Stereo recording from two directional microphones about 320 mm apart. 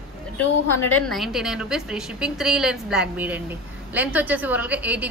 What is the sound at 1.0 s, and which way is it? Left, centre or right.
A woman's voice, centre.